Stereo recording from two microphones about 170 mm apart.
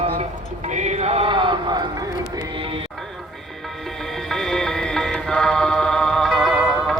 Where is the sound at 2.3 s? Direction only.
30° right (ahead or behind).